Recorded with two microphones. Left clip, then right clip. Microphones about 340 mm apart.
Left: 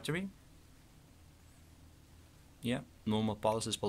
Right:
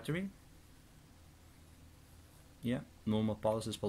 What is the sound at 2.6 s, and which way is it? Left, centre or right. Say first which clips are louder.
Speech: left 1 dB; left.